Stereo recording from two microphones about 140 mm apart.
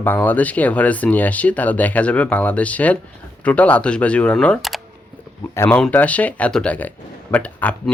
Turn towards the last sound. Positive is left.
turn(degrees=10)  # may be behind; listen again after turning